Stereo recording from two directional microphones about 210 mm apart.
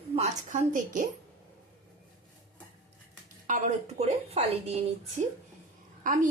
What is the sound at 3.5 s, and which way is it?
A woman's voice, 30° right (ahead or behind).